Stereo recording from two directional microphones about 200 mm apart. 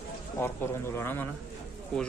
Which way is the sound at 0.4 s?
15° left (ahead or behind).